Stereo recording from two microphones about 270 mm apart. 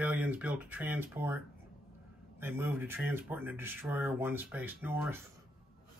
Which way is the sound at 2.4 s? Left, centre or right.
Centre.